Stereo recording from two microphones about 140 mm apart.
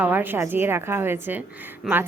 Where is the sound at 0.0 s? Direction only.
15° right (ahead or behind).